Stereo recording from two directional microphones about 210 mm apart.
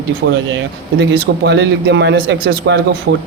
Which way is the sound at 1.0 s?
55° right (ahead or behind).